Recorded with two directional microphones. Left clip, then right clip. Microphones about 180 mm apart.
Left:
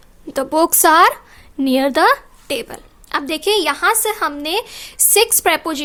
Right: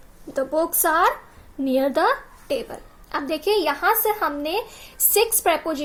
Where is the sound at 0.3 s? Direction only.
55° left (ahead or behind).